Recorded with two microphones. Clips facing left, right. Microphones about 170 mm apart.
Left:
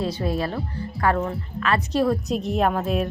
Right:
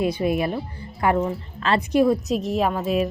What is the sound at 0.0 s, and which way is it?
A woman's voice, 15° right (ahead or behind).